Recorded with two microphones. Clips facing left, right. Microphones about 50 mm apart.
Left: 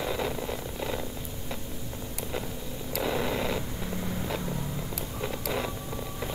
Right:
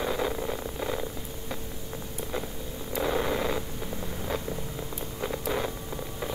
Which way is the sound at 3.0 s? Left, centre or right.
Right.